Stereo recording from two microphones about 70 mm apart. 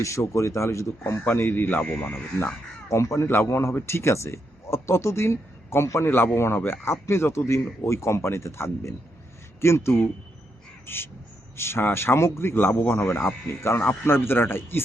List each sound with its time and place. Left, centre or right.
0.3 s speech: left
1.2 s speech: left
2.9 s speech: left
10.8 s crow: left
11.5 s speech: left